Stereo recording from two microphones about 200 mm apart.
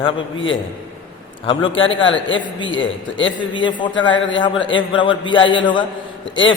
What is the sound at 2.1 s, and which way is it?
Speech, 70° left (ahead or behind).